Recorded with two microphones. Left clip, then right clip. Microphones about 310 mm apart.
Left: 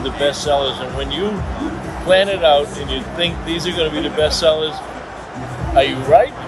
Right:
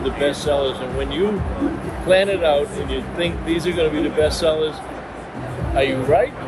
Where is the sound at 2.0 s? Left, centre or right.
Centre.